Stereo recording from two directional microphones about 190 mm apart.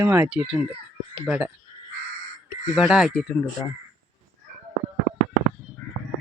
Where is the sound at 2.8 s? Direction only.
5° right (ahead or behind).